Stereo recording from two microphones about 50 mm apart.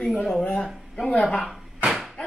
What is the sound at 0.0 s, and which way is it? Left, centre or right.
Speech, centre.